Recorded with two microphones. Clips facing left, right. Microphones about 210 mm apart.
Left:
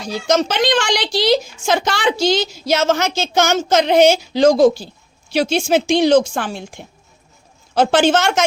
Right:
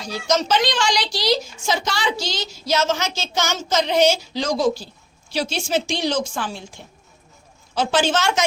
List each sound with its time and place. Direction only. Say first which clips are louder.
0.3 s a woman's voice: left 4 dB; 55° left (ahead or behind)
7.8 s a woman's voice: left 6 dB; 55° left (ahead or behind)